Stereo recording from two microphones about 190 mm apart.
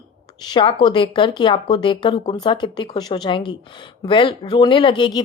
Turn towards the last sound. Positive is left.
turn(degrees=25)  # may be behind; listen again after turning